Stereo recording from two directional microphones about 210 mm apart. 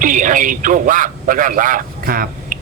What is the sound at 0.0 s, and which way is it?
A man's voice, 40° right (ahead or behind).